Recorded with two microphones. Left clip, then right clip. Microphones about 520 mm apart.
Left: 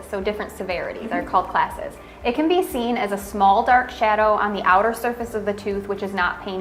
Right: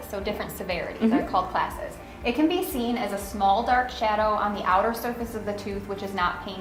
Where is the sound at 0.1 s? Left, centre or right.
Left.